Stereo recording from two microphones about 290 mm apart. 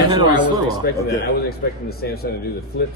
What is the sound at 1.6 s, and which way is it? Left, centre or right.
Speech, left.